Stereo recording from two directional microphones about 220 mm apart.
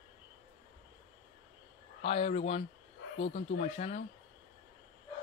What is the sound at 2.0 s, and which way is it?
Speech, 25° left (ahead or behind).